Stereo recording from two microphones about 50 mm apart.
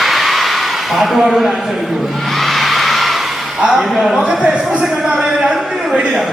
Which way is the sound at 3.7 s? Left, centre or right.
Centre.